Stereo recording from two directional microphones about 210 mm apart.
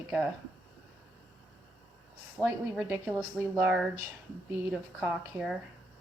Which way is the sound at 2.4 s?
5° right (ahead or behind).